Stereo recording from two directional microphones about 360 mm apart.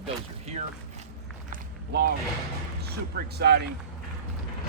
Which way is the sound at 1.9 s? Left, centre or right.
Right.